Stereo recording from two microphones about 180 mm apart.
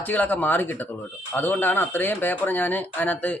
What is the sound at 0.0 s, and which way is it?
Speech, 10° left (ahead or behind).